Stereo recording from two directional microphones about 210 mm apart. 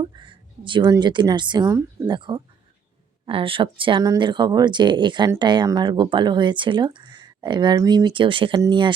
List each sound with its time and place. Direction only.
0.0 s speech: 25° right (ahead or behind)